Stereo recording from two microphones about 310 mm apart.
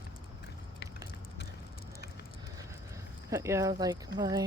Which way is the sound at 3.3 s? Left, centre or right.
Centre.